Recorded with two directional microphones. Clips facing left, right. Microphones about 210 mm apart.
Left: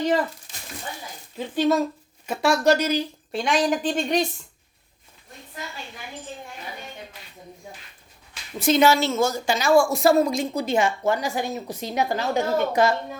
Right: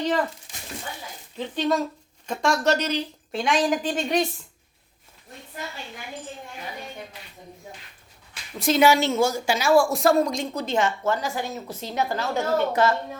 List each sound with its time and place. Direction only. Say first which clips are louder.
1.4 s a woman's voice: left 3 dB; 5° left (ahead or behind)
8.5 s a woman's voice: left 2 dB; centre (ahead or behind)
8.8 s a woman's voice: right 2 dB; 15° right (ahead or behind); by 13.0 s 15° left (ahead or behind)